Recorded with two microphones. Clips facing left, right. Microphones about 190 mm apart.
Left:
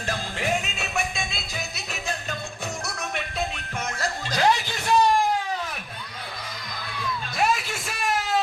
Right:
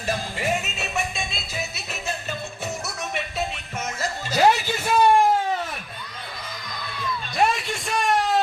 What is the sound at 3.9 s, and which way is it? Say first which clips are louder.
Chuckle: right 4 dB; 5° right (ahead or behind).